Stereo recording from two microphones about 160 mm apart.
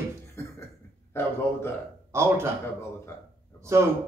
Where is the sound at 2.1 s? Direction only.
15° right (ahead or behind).